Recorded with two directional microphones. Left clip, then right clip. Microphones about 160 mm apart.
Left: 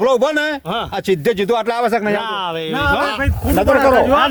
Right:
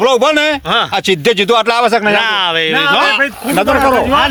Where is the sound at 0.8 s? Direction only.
35° right (ahead or behind).